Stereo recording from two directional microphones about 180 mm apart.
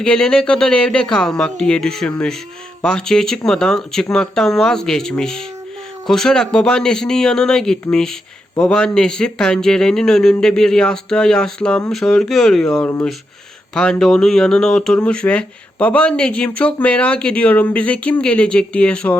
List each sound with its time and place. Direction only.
0.0 s speech: 5° left (ahead or behind)